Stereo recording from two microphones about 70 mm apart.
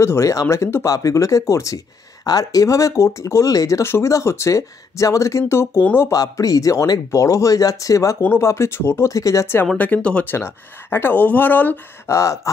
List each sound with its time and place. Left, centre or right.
0.0 s speech: left
0.8 s speech: left
2.2 s speech: left
6.1 s speech: left
9.1 s speech: left
9.8 s speech: centre
10.2 s speech: left
12.1 s speech: left